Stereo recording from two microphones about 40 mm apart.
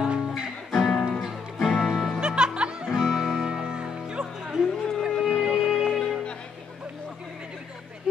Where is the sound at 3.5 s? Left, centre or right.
Centre.